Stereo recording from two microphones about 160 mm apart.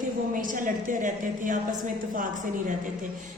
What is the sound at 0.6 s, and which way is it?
Speech, 55° right (ahead or behind).